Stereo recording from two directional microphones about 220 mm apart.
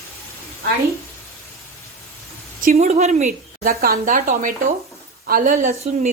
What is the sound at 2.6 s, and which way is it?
Speech, 35° right (ahead or behind).